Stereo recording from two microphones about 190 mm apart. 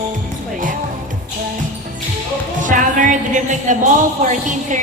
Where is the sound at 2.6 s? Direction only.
45° right (ahead or behind).